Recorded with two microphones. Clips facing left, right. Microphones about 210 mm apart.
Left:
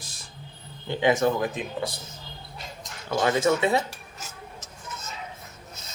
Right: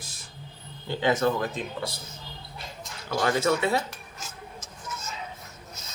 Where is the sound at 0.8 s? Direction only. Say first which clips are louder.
Left 2 dB; 15° left (ahead or behind).